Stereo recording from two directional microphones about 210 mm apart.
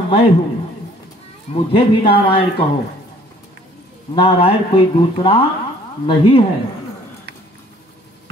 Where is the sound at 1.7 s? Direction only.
25° left (ahead or behind).